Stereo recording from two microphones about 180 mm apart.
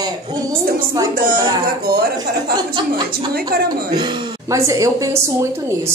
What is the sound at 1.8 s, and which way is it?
A woman's voice, 55° right (ahead or behind).